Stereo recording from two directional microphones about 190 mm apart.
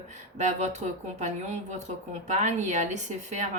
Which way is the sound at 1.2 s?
40° right (ahead or behind).